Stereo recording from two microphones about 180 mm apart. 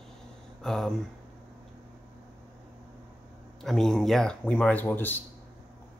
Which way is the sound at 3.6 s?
Centre (ahead or behind).